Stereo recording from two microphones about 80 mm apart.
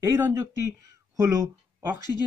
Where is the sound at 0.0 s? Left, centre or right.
Right.